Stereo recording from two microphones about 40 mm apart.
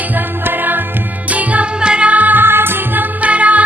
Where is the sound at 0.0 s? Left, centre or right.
Right.